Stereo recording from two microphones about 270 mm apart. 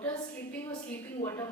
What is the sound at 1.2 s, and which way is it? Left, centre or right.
Speech, centre.